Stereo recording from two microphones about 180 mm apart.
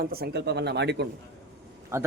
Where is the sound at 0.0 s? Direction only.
60° right (ahead or behind).